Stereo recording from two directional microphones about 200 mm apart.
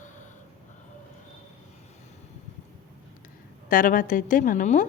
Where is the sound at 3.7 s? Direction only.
40° left (ahead or behind).